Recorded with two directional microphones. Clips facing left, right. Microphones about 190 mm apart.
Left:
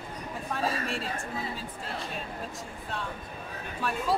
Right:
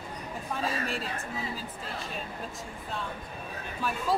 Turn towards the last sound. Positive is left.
turn(degrees=0)  # may be behind; listen again after turning